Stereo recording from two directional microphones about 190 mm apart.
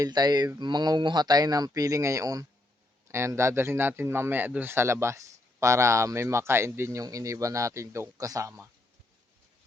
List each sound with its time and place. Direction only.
0.0 s speech: 20° right (ahead or behind)